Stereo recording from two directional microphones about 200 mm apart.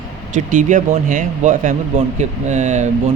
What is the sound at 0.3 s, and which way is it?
Speech, 40° right (ahead or behind).